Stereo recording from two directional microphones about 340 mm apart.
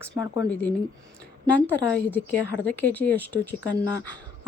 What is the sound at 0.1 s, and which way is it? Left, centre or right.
Speech, centre.